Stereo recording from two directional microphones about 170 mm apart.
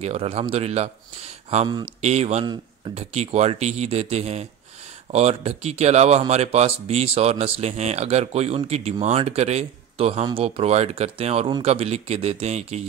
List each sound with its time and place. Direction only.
0.0 s speech: 35° right (ahead or behind)
2.4 s a man's voice: 25° right (ahead or behind)
2.9 s speech: 40° right (ahead or behind)